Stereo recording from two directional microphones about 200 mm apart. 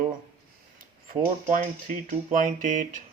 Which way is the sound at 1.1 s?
40° right (ahead or behind).